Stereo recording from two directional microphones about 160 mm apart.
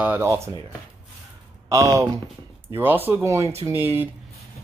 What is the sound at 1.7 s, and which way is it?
Speech, 20° right (ahead or behind).